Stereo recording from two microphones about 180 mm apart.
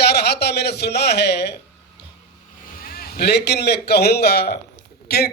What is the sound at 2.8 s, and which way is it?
A man's voice, 60° left (ahead or behind).